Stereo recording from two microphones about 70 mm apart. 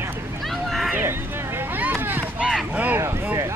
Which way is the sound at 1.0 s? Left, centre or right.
Right.